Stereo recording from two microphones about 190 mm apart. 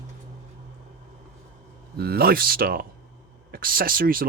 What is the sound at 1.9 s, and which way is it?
Speech, 55° right (ahead or behind).